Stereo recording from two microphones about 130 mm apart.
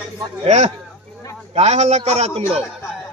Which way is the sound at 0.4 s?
60° right (ahead or behind).